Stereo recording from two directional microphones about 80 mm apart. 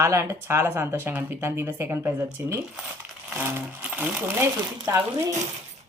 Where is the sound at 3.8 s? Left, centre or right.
Centre.